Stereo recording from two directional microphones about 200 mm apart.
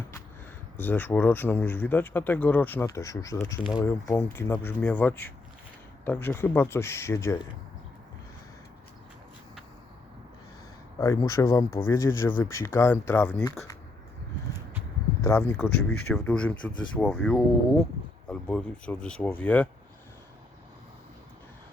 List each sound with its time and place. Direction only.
0.8 s speech: 10° left (ahead or behind)
11.0 s speech: 15° left (ahead or behind)
15.2 s speech: 15° left (ahead or behind)